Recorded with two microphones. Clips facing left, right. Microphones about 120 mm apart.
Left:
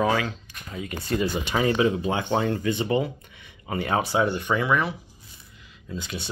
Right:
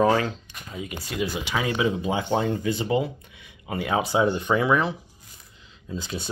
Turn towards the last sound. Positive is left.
turn(degrees=-35)  # may be behind; listen again after turning